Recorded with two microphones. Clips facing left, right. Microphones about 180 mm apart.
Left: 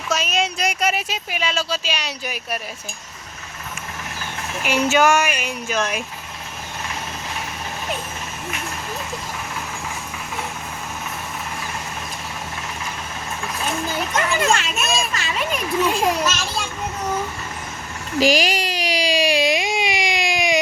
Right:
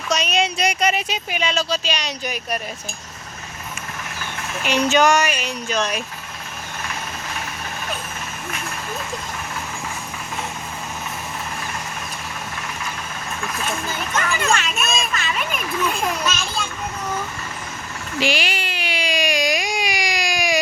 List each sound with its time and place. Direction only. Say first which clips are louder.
0.1 s speech: right 1 dB; centre (ahead or behind)
4.6 s speech: even; 10° left (ahead or behind)
14.1 s speech: left 2 dB; 15° left (ahead or behind)
14.5 s a child's voice: left 1 dB; 30° left (ahead or behind)
18.2 s baby cry: left 5 dB; 40° left (ahead or behind); by 20.6 s 20° left (ahead or behind)